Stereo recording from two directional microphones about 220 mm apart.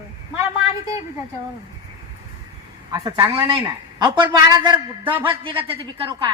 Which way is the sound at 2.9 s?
15° right (ahead or behind).